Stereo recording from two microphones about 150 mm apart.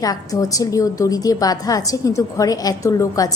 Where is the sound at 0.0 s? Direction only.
25° left (ahead or behind).